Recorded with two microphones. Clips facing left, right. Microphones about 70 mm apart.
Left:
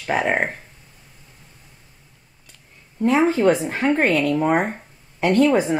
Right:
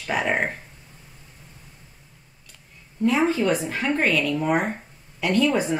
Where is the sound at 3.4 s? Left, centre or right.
Left.